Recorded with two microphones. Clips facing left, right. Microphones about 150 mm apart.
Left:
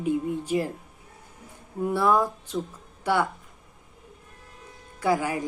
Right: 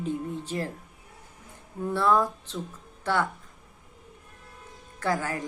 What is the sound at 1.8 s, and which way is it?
Speech, 10° left (ahead or behind).